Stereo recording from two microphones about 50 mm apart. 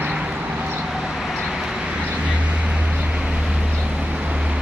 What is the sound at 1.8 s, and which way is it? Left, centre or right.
Vehicle, right.